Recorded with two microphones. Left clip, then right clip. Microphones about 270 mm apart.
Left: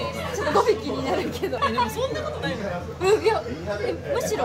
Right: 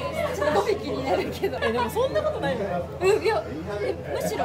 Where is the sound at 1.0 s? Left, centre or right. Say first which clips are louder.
Right 1 dB; centre.